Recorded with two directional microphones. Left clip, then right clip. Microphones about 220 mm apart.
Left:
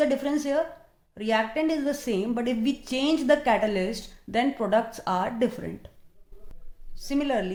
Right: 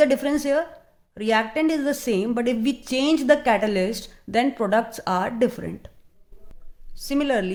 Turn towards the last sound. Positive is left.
turn(degrees=-35)  # may be behind; listen again after turning